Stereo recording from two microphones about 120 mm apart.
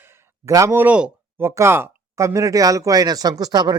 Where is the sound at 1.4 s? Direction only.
20° right (ahead or behind).